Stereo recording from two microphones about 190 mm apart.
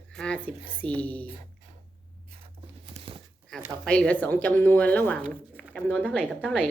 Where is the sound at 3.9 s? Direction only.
5° left (ahead or behind).